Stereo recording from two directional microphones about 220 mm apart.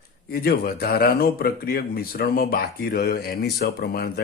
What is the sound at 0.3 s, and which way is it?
Speech, 45° left (ahead or behind).